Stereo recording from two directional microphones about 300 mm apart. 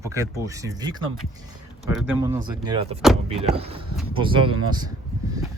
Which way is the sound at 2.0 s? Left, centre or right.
Centre.